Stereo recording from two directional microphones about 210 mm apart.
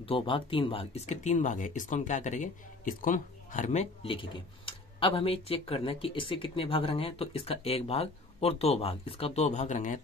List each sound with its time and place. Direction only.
0.0 s speech: 25° left (ahead or behind)